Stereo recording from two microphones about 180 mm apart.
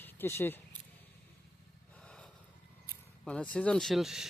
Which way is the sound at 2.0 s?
5° left (ahead or behind).